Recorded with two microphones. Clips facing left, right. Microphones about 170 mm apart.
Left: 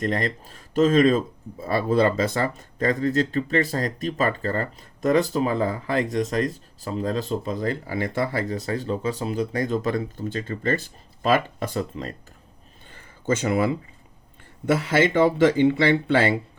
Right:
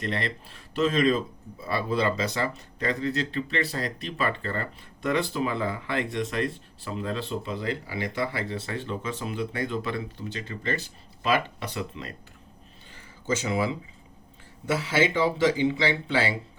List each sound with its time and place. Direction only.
0.0 s speech: 45° left (ahead or behind)
12.9 s a sound: 55° left (ahead or behind)
14.7 s speech: 55° left (ahead or behind)